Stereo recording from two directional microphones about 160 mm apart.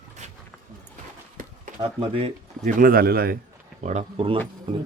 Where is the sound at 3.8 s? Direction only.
45° right (ahead or behind).